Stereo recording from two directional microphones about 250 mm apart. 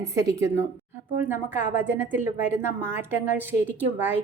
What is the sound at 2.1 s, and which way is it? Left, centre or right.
Speech, left.